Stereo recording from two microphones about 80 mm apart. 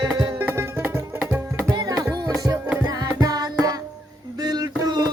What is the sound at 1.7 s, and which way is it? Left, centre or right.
Music, right.